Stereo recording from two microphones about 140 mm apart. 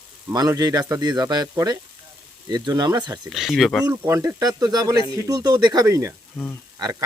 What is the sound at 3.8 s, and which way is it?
Speech, 20° right (ahead or behind).